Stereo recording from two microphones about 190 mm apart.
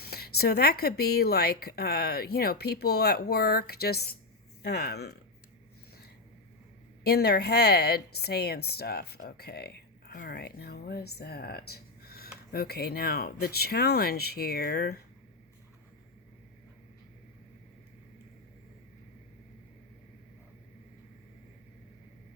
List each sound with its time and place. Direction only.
0.0 s a woman's voice: 55° left (ahead or behind)
7.0 s a woman's voice: 55° left (ahead or behind)